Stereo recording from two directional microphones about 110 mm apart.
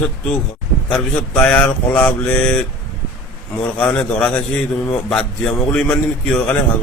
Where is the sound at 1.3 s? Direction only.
15° left (ahead or behind).